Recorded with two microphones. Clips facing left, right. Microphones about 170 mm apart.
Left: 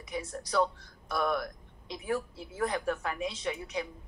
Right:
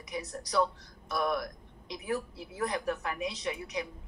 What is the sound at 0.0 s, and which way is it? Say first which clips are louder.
A woman's voice: left 1 dB; 25° left (ahead or behind).